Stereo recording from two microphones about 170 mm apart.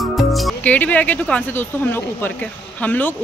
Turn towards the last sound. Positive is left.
turn(degrees=10)  # may be behind; listen again after turning